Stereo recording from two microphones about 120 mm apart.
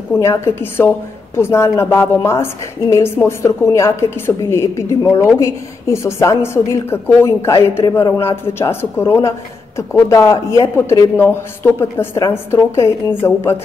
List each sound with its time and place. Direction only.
0.1 s a woman's voice: 20° left (ahead or behind)